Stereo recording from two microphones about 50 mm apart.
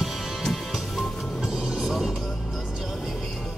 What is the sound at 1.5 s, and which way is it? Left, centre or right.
Vehicle, centre.